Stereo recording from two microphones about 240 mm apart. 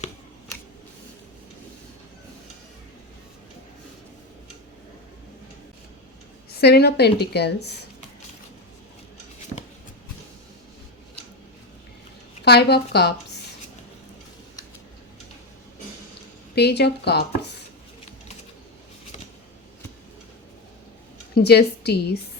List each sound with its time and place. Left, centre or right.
6.6 s a woman's voice: left
12.5 s a woman's voice: left
16.6 s a woman's voice: left
21.3 s a woman's voice: left